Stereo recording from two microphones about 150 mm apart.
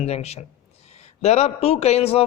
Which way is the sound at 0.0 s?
45° left (ahead or behind).